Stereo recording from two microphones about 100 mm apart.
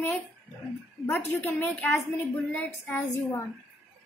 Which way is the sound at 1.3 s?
20° left (ahead or behind).